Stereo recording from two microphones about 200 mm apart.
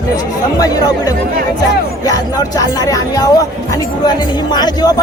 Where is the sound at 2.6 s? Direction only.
15° left (ahead or behind).